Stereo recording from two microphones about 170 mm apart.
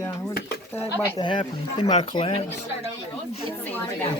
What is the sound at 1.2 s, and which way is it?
Speech, 30° left (ahead or behind).